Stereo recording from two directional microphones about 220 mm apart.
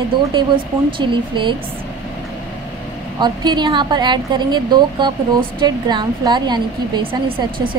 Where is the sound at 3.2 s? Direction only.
20° right (ahead or behind).